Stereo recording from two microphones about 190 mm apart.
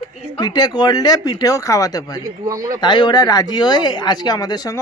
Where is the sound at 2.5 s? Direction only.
20° right (ahead or behind).